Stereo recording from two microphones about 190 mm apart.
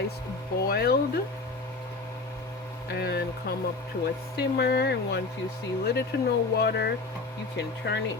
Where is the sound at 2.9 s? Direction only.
60° left (ahead or behind).